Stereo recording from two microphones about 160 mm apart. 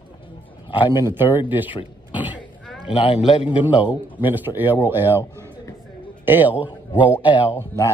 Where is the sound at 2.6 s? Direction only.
Centre (ahead or behind).